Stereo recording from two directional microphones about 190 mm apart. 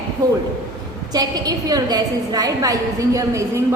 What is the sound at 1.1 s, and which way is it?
A woman's voice, 20° right (ahead or behind).